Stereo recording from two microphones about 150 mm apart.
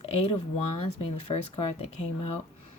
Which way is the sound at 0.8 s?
40° left (ahead or behind).